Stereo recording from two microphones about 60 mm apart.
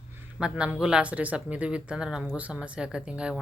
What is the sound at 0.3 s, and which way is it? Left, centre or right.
Speech, centre.